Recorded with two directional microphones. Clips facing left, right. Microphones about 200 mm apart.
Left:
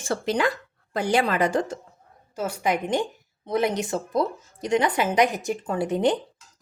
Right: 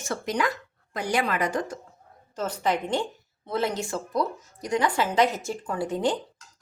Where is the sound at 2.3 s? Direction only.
10° left (ahead or behind).